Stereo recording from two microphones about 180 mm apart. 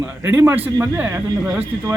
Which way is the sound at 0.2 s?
15° right (ahead or behind).